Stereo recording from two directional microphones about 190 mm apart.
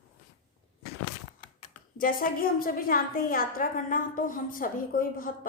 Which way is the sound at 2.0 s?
45° left (ahead or behind).